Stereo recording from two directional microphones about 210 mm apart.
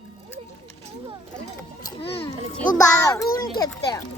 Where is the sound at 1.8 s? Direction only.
25° left (ahead or behind).